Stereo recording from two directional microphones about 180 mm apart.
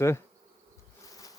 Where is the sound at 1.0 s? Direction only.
20° left (ahead or behind).